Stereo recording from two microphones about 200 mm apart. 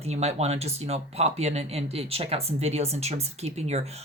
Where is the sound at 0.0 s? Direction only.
30° right (ahead or behind).